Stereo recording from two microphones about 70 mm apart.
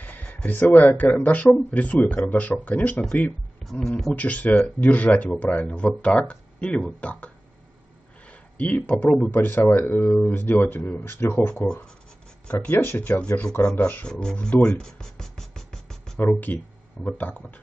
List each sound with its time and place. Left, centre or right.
0.0 s a sound: left
0.5 s speech: left
3.6 s speech: centre
4.1 s speech: left
8.5 s speech: centre
9.2 s speech: left
11.6 s speech: centre
12.7 s speech: left
13.1 s speech: centre
14.2 s music: centre
16.2 s speech: left